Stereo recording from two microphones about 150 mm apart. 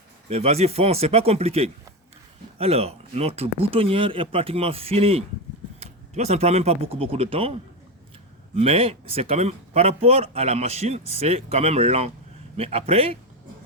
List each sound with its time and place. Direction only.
0.3 s speech: 45° right (ahead or behind)
8.5 s speech: 40° right (ahead or behind)